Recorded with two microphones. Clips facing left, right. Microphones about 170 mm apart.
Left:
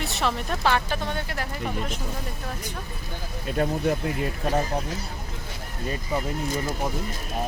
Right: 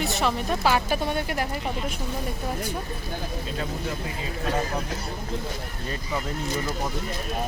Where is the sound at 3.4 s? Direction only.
60° left (ahead or behind).